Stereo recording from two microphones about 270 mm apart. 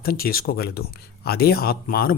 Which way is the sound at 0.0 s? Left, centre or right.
Left.